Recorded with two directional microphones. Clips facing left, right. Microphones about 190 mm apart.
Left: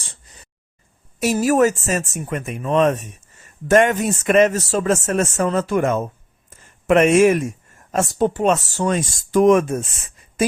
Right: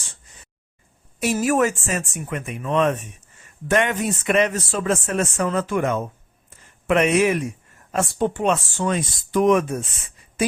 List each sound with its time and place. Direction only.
1.2 s speech: 40° left (ahead or behind)